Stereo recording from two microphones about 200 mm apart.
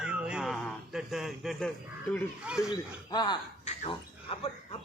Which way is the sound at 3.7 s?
30° left (ahead or behind).